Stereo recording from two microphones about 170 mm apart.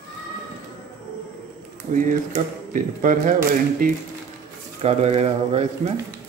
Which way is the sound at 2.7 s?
50° right (ahead or behind).